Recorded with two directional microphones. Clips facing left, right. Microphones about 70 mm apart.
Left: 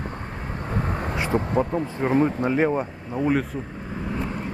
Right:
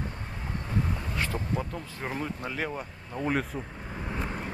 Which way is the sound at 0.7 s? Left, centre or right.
Left.